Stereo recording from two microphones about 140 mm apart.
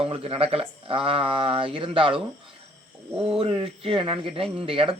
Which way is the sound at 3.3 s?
45° right (ahead or behind).